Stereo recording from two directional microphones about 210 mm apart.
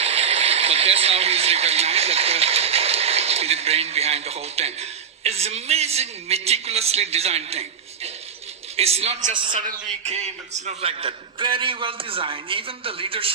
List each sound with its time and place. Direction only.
0.0 s speech: 30° right (ahead or behind)
8.7 s a man's voice: 30° right (ahead or behind)
9.6 s a man's voice: 35° right (ahead or behind)